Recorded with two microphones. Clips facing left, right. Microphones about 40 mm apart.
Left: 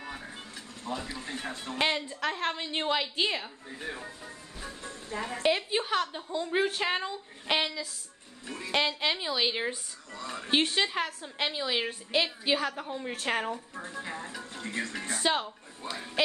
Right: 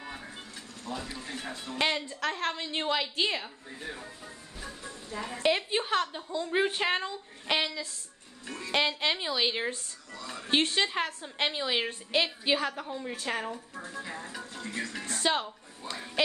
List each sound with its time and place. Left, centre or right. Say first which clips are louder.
0.0 s music: left 1 dB; centre
0.9 s a woman's voice: left 1 dB; centre
1.8 s a woman's voice: even; centre
3.8 s speech: left 2 dB; left
5.4 s a woman's voice: even; centre
6.6 s speech: right 2 dB; centre
7.0 s a woman's voice: even; centre
10.1 s speech: left 3 dB; left
10.5 s a woman's voice: even; centre
12.8 s a woman's voice: left 1 dB; centre
13.3 s speech: left 4 dB; left
15.1 s a woman's voice: even; centre
15.8 s speech: left 1 dB; left